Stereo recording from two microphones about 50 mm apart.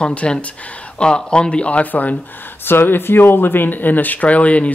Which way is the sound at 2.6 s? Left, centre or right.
Left.